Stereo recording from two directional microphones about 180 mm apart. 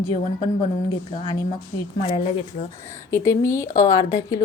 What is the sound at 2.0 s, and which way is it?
Speech, 30° left (ahead or behind).